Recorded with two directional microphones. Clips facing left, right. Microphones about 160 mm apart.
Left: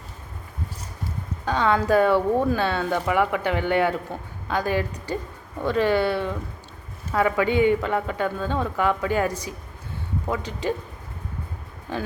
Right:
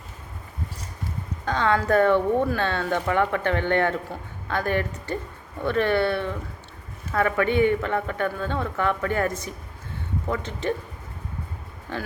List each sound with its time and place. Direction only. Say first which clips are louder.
1.5 s speech: left 1 dB; 10° left (ahead or behind)